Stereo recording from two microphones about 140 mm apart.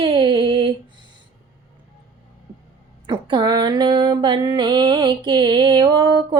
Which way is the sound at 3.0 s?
35° right (ahead or behind).